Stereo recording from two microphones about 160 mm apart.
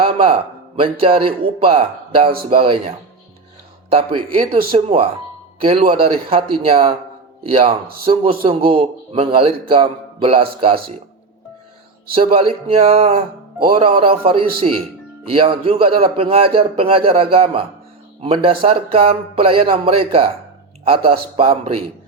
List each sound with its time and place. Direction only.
0.0 s a sound: 35° right (ahead or behind)
0.8 s a man's voice: 35° right (ahead or behind)
3.9 s a man's voice: 35° right (ahead or behind)
12.1 s a man's voice: 35° right (ahead or behind)